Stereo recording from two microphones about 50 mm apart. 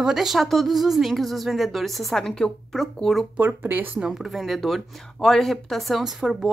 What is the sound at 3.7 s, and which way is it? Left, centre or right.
Speech, right.